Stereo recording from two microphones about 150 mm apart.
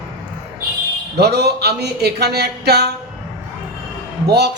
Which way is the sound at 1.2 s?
90° right.